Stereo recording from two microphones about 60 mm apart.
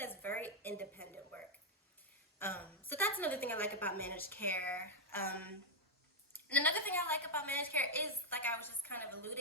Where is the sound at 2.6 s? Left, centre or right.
Left.